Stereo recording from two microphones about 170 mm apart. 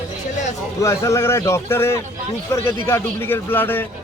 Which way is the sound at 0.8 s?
15° left (ahead or behind).